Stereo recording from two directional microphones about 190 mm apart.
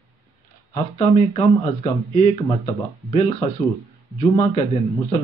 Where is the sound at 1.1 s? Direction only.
30° left (ahead or behind).